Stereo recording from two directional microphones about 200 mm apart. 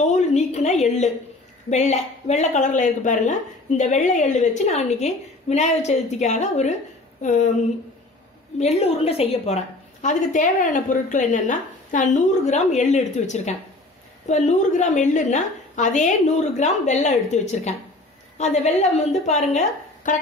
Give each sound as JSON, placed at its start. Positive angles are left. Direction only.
{"t": 0.0, "sound": "a sound", "side_deg": 35}
{"t": 1.7, "sound": "a woman's voice", "side_deg": 35}
{"t": 8.5, "sound": "a woman's voice", "side_deg": 35}